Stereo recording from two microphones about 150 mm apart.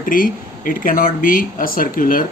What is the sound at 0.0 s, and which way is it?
A man's voice, 70° left (ahead or behind).